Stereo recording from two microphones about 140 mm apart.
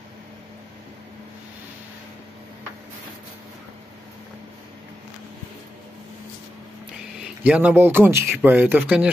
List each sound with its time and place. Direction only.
7.4 s speech: 10° right (ahead or behind)